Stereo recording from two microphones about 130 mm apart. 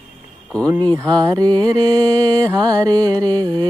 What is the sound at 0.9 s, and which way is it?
Mantra, 30° right (ahead or behind).